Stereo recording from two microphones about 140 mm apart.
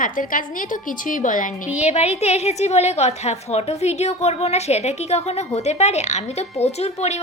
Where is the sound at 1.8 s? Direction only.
50° left (ahead or behind).